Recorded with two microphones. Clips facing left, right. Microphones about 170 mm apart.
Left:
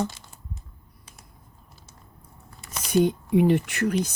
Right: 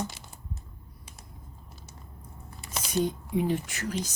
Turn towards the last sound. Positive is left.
turn(degrees=60)  # may be behind; listen again after turning